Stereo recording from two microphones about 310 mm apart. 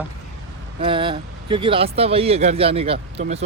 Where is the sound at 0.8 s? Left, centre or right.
Centre.